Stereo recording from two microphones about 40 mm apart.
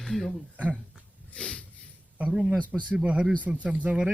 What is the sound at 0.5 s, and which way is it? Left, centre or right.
Speech, right.